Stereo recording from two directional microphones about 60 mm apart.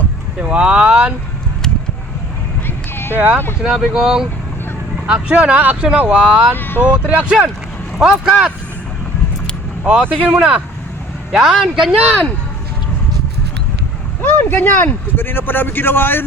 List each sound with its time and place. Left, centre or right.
0.3 s speech: right
2.6 s clip-clop: left
3.2 s speech: right
3.6 s speech: centre
5.3 s speech: right
6.6 s speech: left
7.1 s speech: centre
9.8 s speech: centre
11.3 s speech: centre
14.2 s speech: left